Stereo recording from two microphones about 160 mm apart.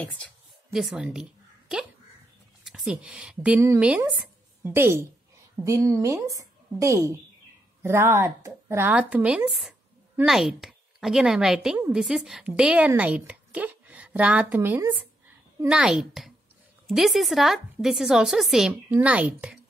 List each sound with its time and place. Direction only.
0.7 s speech: 5° right (ahead or behind)
2.6 s a woman's voice: centre (ahead or behind)